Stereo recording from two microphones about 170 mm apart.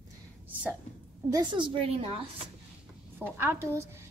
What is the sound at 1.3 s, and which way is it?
Speech, 30° right (ahead or behind).